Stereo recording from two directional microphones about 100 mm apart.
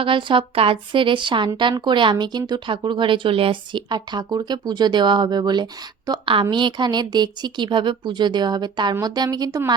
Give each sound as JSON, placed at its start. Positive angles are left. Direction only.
{"t": 0.0, "sound": "a woman's voice", "side_deg": -55}